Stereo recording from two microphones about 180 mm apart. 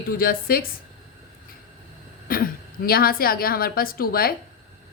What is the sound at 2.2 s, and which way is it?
A woman's voice, 55° left (ahead or behind).